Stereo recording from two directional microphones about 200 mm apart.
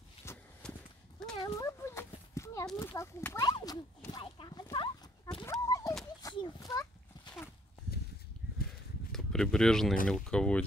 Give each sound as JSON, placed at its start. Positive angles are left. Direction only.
{"t": 0.2, "sound": "walk", "side_deg": 10}
{"t": 1.4, "sound": "a sound", "side_deg": 15}
{"t": 9.1, "sound": "speech", "side_deg": 5}